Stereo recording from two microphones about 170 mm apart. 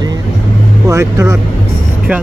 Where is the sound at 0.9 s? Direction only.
20° right (ahead or behind).